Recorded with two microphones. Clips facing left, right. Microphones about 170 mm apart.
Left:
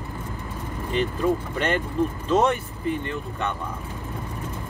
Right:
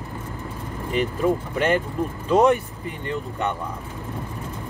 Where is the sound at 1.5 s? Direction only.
10° right (ahead or behind).